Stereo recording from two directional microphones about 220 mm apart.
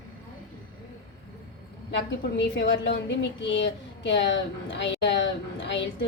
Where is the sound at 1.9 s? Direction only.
50° left (ahead or behind).